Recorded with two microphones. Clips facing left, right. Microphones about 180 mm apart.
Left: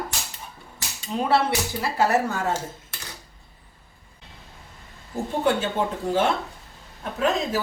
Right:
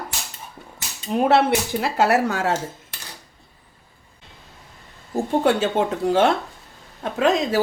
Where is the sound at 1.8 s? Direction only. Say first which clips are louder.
Right 2 dB; 80° right.